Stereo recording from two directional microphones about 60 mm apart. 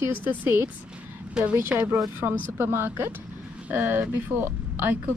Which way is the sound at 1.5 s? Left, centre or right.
Right.